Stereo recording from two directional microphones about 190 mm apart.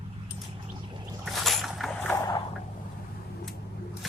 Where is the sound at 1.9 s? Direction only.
10° left (ahead or behind).